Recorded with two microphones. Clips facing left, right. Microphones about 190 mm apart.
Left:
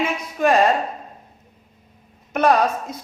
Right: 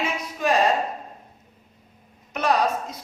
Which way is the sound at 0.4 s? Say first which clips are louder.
Left 5 dB; 55° left (ahead or behind).